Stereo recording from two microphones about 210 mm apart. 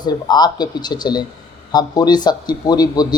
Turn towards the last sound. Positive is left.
turn(degrees=20)  # may be behind; listen again after turning